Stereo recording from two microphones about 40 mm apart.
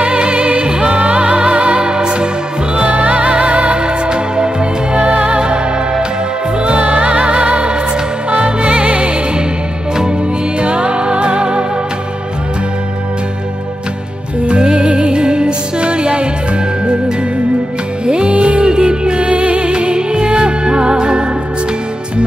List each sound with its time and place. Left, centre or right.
0.0 s music: right
6.6 s music: right
10.6 s music: right
14.4 s music: right
18.0 s music: right
19.7 s music: right